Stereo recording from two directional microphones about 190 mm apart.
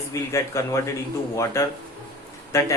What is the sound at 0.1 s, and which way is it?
Speech, 15° left (ahead or behind).